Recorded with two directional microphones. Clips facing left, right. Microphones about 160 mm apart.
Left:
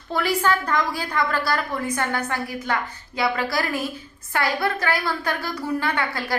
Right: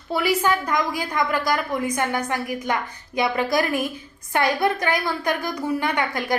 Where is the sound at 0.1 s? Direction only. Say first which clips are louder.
Right 1 dB; 10° right (ahead or behind).